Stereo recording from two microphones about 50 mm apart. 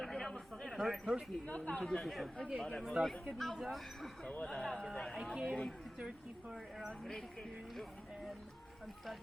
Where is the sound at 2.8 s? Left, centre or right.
Centre.